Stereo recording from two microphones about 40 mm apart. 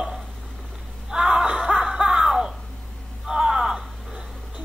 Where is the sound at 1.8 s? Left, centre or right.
Centre.